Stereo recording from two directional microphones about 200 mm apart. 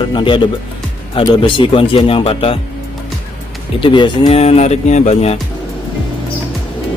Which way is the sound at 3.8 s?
25° left (ahead or behind).